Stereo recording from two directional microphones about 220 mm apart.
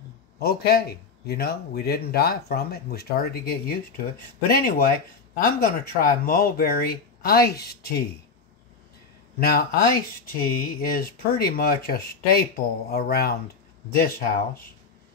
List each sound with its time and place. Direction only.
0.4 s a man's voice: 45° left (ahead or behind)
9.4 s a man's voice: 45° left (ahead or behind)